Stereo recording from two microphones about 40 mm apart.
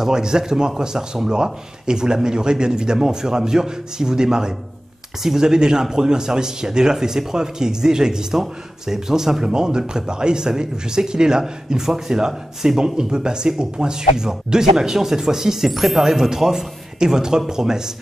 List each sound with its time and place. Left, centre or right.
0.0 s a man's voice: centre